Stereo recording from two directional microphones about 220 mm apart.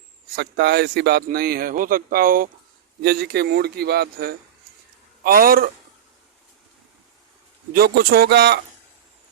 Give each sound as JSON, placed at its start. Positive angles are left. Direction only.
{"t": 0.3, "sound": "a man's voice", "side_deg": -50}
{"t": 7.7, "sound": "speech", "side_deg": -45}